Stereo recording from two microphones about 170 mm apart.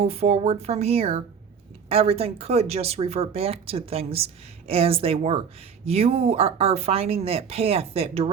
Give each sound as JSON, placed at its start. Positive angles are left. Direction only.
{"t": 0.0, "sound": "speech", "side_deg": -35}